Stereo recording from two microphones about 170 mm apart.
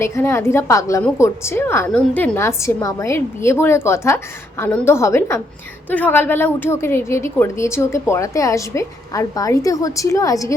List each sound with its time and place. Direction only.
0.0 s a woman's voice: 15° left (ahead or behind)